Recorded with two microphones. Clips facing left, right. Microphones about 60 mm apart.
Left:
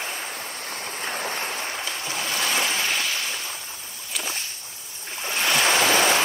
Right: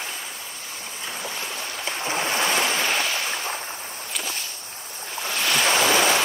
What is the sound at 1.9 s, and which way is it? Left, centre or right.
Ocean, right.